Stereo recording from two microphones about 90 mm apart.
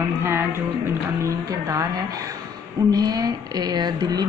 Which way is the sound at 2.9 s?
45° right (ahead or behind).